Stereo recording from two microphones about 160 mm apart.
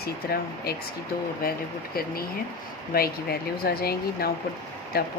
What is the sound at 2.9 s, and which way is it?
Speech, 70° left (ahead or behind).